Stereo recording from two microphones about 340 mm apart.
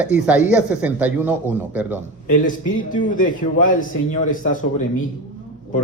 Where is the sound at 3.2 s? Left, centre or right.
Left.